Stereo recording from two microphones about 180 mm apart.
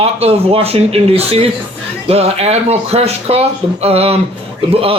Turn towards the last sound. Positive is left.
turn(degrees=-30)  # may be behind; listen again after turning